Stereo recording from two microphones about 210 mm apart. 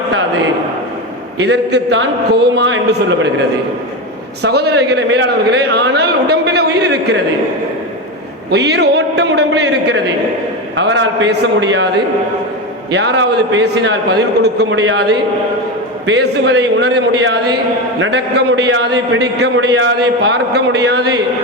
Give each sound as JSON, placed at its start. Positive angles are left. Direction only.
{"t": 1.5, "sound": "a man's voice", "side_deg": -55}
{"t": 4.4, "sound": "a man's voice", "side_deg": -50}
{"t": 8.4, "sound": "a man's voice", "side_deg": -50}
{"t": 12.9, "sound": "a man's voice", "side_deg": -55}